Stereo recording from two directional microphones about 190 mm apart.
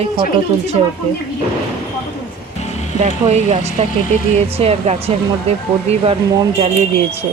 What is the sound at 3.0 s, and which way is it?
Speech, 35° right (ahead or behind).